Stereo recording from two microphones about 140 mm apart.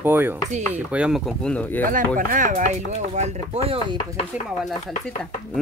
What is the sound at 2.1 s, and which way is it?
Speech, 70° right (ahead or behind).